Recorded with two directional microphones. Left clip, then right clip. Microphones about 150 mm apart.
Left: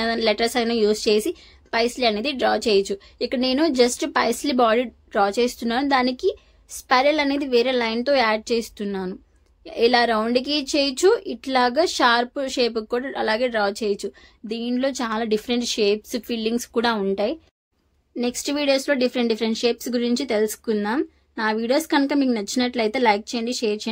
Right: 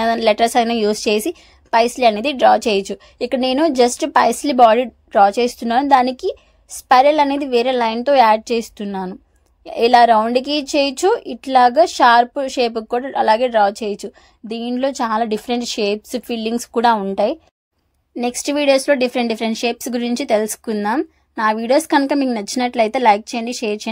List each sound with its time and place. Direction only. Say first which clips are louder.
0.0 s a woman's voice: right 6 dB; 50° right (ahead or behind)
18.1 s speech: right 5 dB; 50° right (ahead or behind)